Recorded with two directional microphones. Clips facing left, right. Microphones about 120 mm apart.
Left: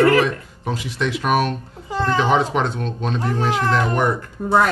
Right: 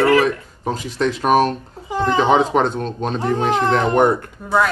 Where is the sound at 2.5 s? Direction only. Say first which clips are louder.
Right 4 dB; 40° right (ahead or behind).